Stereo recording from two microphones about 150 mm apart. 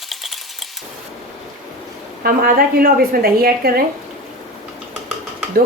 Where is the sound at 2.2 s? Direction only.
80° right.